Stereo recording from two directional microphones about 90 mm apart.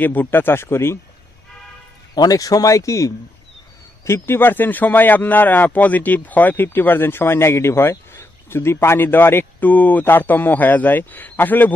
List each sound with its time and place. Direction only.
0.0 s speech: 20° left (ahead or behind)
2.1 s speech: 45° left (ahead or behind); by 11.7 s 20° left (ahead or behind)